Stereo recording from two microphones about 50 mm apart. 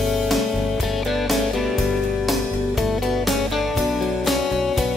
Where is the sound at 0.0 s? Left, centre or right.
Centre.